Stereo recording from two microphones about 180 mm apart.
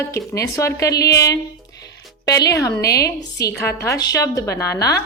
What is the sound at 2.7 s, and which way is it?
Speech, 60° left (ahead or behind).